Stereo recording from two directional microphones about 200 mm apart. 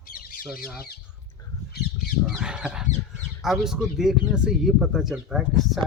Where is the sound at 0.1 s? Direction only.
45° left (ahead or behind).